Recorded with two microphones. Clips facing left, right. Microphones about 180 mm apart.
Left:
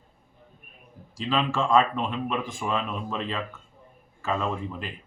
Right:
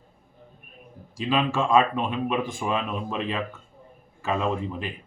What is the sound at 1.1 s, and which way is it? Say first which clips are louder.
Speech: right 2 dB; 10° right (ahead or behind).